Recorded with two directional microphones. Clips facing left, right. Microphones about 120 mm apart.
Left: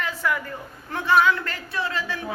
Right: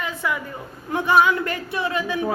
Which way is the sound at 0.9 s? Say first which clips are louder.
Right 2 dB; 15° right (ahead or behind).